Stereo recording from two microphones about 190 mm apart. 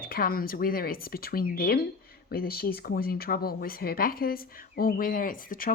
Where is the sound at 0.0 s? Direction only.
50° left (ahead or behind).